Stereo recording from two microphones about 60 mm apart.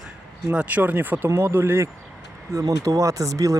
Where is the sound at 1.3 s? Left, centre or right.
Right.